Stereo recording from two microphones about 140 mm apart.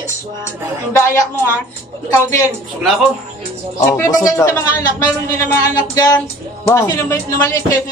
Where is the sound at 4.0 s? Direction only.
20° left (ahead or behind).